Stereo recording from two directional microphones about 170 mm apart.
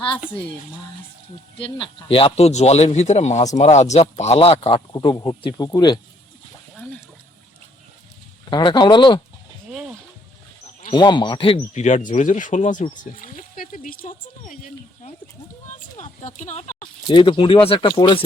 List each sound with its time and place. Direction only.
1.5 s speech: 30° left (ahead or behind)
4.9 s speech: 25° left (ahead or behind)
8.4 s speech: 25° left (ahead or behind)
10.9 s speech: 25° left (ahead or behind); by 14.6 s 50° left (ahead or behind)
16.2 s speech: 45° left (ahead or behind)
16.8 s speech: 30° left (ahead or behind)